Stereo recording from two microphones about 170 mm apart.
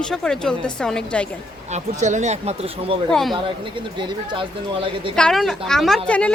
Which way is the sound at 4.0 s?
25° right (ahead or behind).